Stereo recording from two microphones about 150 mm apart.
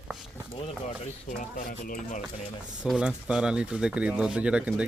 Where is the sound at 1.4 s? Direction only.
65° left (ahead or behind).